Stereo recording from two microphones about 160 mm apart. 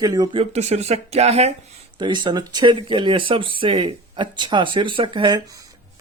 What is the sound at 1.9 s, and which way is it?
Speech, 30° right (ahead or behind).